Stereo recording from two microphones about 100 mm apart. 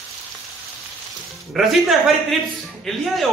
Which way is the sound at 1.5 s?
Centre (ahead or behind).